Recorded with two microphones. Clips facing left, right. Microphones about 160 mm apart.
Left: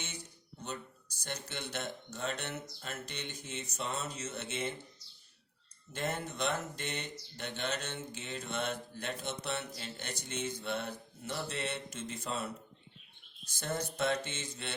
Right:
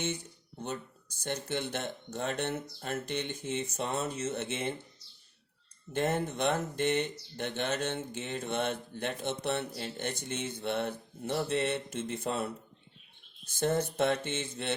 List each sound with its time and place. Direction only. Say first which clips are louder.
0.6 s speech: right 5 dB; 55° right (ahead or behind)
5.9 s speech: right 7 dB; 55° right (ahead or behind)